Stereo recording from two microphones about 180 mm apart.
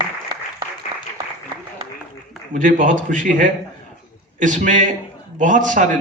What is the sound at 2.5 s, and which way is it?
A man's voice, 50° right (ahead or behind).